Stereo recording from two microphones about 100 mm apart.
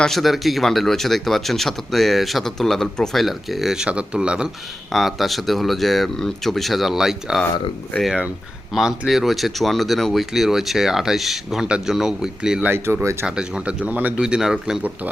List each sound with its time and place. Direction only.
0.0 s speech: centre (ahead or behind)
12.7 s speech: 25° right (ahead or behind)
13.2 s speech: 10° right (ahead or behind)